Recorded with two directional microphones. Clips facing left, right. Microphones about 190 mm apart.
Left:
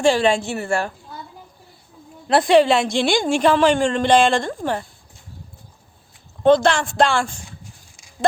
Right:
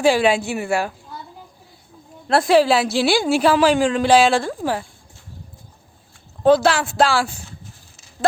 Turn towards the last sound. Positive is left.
turn(degrees=-5)  # may be behind; listen again after turning